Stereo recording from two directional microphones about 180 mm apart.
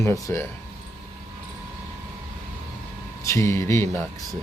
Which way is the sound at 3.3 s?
15° left (ahead or behind).